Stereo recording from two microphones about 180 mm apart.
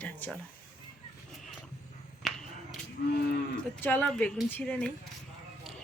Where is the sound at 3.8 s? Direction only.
10° left (ahead or behind).